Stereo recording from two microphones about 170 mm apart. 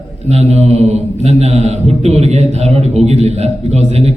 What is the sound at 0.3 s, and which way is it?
Mantra, 40° right (ahead or behind).